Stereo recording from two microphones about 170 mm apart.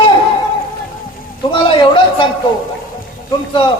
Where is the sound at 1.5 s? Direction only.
30° left (ahead or behind).